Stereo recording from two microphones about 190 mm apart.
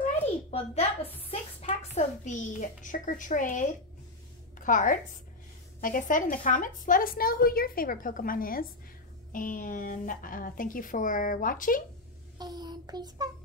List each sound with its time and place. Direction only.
0.0 s a sound: 35° left (ahead or behind)
1.2 s a child's voice: 30° left (ahead or behind)
12.4 s child singing: 20° right (ahead or behind)